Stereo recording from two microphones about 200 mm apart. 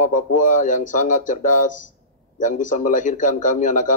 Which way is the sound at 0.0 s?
40° left (ahead or behind).